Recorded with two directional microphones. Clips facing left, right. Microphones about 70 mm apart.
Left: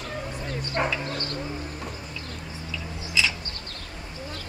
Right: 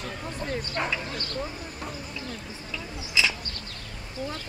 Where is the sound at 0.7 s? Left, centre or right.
Left.